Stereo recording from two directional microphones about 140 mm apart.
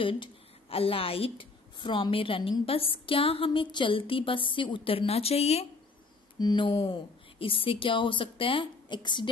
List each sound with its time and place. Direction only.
0.0 s a woman's voice: 40° left (ahead or behind)
6.3 s a woman's voice: 30° left (ahead or behind)